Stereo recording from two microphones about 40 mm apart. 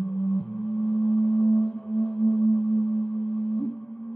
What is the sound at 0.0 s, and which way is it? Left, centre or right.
Singing bowl, centre.